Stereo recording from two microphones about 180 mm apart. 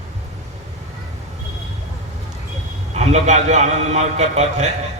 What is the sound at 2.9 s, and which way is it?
A man's voice, 40° right (ahead or behind).